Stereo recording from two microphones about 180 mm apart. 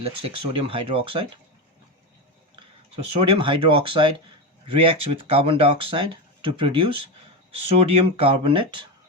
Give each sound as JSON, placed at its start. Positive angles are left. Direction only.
{"t": 0.0, "sound": "speech", "side_deg": -30}
{"t": 3.2, "sound": "speech", "side_deg": -30}